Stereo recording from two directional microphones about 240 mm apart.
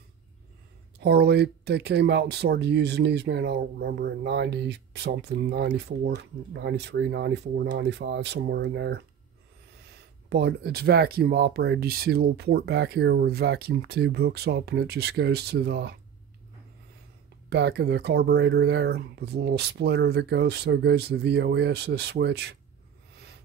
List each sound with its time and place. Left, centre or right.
0.9 s speech: right
10.3 s speech: right
17.5 s speech: right